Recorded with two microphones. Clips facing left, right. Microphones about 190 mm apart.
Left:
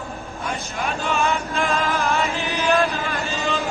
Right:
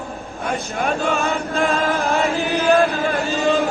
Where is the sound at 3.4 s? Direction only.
55° right (ahead or behind).